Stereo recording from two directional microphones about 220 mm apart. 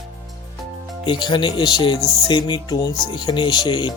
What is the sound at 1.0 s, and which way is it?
Speech, 20° left (ahead or behind).